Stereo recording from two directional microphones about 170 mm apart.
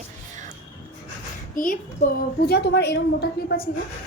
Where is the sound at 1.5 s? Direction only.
55° left (ahead or behind); by 3.6 s 70° left (ahead or behind).